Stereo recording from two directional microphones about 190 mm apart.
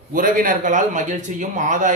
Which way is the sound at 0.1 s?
45° right (ahead or behind).